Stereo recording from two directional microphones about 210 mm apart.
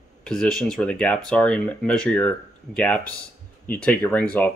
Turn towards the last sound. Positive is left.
turn(degrees=10)  # may be behind; listen again after turning